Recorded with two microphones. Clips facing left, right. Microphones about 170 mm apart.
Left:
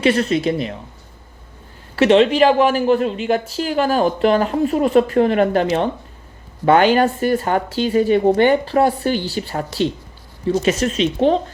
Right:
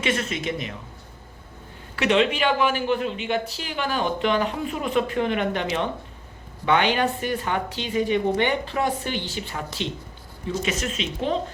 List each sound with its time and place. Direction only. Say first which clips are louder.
0.0 s speech: left 10 dB; 35° left (ahead or behind)
2.0 s speech: left 9 dB; 35° left (ahead or behind)